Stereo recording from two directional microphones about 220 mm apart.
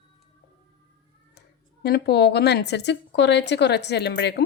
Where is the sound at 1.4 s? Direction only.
45° left (ahead or behind).